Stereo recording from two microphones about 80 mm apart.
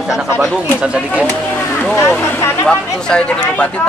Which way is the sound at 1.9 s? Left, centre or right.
Left.